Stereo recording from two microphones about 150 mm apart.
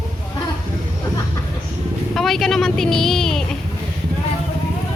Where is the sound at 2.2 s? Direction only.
Centre (ahead or behind).